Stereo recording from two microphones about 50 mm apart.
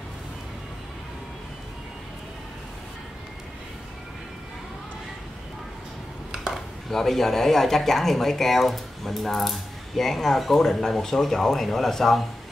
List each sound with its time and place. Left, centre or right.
6.4 s speech: centre